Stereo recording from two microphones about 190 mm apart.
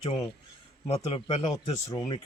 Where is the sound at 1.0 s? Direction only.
25° left (ahead or behind).